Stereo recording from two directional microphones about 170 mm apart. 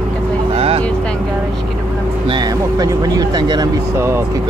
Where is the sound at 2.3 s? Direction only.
25° right (ahead or behind).